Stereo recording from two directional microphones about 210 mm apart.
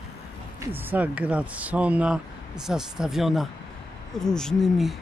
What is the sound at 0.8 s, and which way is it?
Speech, 5° right (ahead or behind).